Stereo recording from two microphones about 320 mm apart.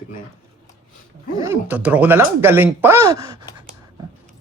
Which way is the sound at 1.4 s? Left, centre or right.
Centre.